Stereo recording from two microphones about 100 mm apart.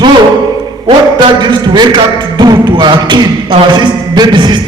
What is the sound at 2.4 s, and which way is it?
Beatboxing, 45° right (ahead or behind).